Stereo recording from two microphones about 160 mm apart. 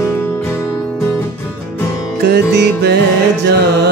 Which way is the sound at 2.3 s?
90° right.